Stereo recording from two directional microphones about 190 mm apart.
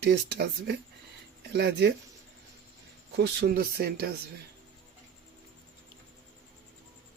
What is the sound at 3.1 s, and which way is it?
Speech, 60° right (ahead or behind).